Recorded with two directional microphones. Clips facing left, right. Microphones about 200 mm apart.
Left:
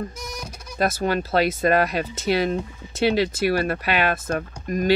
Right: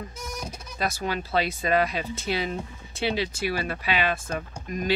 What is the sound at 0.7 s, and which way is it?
Speech, 55° left (ahead or behind).